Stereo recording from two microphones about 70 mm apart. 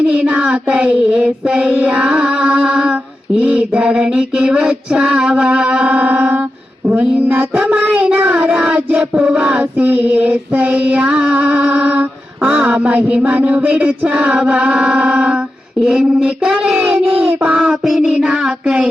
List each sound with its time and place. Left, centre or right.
0.0 s mantra: centre
1.7 s a sound: centre
7.7 s child singing: right
8.5 s a sound: centre
11.9 s mantra: right
18.0 s child singing: centre